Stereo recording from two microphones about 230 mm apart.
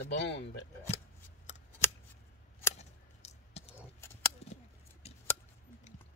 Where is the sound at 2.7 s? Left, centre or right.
Left.